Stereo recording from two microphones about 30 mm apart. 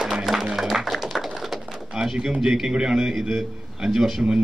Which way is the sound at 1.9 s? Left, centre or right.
Centre.